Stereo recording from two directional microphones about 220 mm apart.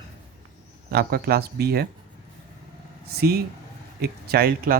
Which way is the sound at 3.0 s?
45° right (ahead or behind).